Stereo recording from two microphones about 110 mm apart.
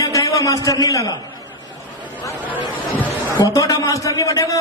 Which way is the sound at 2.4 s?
15° right (ahead or behind).